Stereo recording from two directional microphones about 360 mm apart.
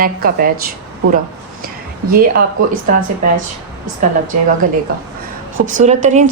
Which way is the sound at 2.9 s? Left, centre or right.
Right.